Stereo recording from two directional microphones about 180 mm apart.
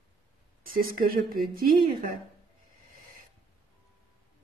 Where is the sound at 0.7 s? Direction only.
50° right (ahead or behind).